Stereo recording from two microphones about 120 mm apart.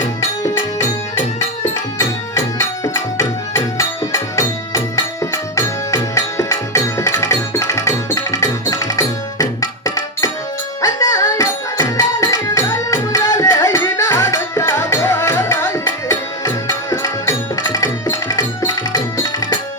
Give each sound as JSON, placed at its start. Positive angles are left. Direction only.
{"t": 2.0, "sound": "music", "side_deg": 25}